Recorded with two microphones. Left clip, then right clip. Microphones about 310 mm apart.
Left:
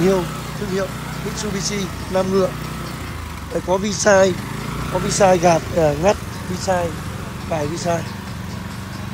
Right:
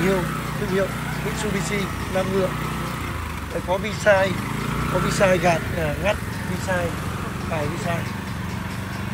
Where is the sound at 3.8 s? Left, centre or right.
Centre.